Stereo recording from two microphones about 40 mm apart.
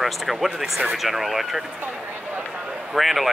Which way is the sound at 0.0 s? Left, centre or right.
Centre.